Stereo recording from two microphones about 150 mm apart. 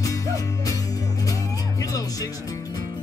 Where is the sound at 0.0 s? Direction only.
20° left (ahead or behind).